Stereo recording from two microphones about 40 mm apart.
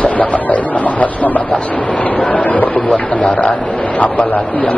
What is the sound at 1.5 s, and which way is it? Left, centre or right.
Speech, centre.